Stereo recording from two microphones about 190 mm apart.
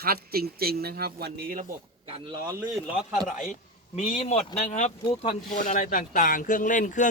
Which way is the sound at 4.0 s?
35° left (ahead or behind).